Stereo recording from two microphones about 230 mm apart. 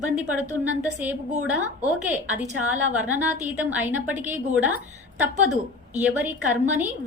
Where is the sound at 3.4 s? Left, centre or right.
Centre.